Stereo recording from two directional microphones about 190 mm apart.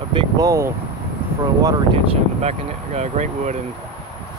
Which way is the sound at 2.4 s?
35° right (ahead or behind).